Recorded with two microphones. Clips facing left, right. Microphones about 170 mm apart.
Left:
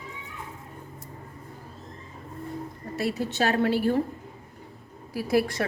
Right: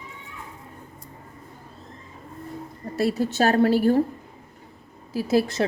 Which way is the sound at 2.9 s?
40° right (ahead or behind).